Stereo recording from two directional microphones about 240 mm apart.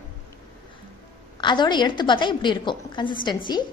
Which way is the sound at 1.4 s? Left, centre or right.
Centre.